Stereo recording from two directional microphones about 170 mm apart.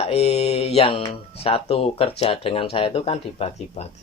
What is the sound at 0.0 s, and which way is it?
Speech, 35° left (ahead or behind).